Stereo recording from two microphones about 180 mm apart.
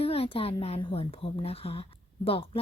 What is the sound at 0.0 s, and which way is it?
A woman's voice, 35° left (ahead or behind).